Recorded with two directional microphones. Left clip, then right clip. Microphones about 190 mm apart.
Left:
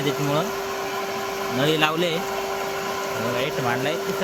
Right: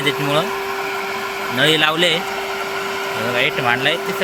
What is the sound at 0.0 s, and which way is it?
Speech, 10° left (ahead or behind).